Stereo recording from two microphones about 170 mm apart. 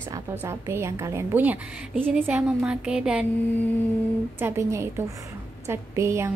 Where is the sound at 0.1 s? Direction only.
15° right (ahead or behind).